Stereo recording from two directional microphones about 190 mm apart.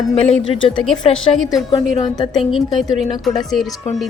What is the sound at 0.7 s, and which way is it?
Speech, 5° left (ahead or behind).